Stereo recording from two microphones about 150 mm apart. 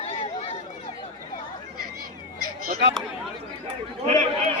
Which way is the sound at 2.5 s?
80° right.